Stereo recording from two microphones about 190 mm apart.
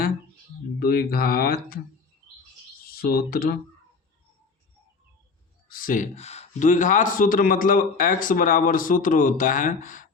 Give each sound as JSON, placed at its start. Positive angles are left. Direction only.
{"t": 0.8, "sound": "speech", "side_deg": 55}
{"t": 2.8, "sound": "speech", "side_deg": 50}
{"t": 5.6, "sound": "speech", "side_deg": 50}